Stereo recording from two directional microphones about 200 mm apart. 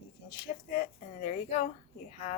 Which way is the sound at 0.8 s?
40° left (ahead or behind).